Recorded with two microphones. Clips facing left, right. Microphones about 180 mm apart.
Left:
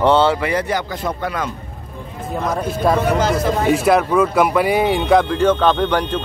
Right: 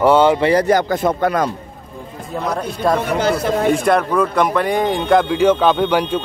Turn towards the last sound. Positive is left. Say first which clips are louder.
# right 2 dB
turn(degrees=-10)  # may be behind; listen again after turning